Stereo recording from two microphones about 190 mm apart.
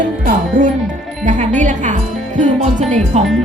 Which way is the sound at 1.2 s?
40° right (ahead or behind).